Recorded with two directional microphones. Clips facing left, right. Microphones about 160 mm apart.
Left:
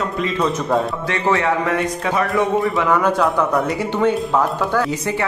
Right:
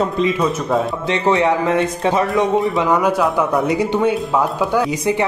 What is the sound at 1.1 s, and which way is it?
Speech, 20° right (ahead or behind).